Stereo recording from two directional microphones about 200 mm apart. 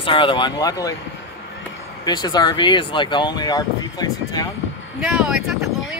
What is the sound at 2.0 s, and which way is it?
Speech, 20° left (ahead or behind).